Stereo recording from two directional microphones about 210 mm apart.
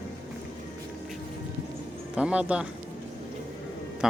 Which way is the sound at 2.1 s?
5° right (ahead or behind).